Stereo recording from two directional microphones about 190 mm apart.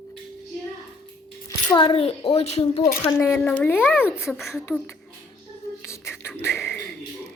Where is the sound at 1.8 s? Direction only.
30° left (ahead or behind).